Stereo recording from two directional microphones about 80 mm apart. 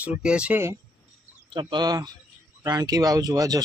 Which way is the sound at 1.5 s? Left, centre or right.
Right.